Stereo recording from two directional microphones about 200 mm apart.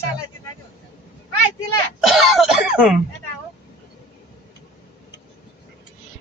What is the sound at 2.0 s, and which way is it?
Cough, centre (ahead or behind).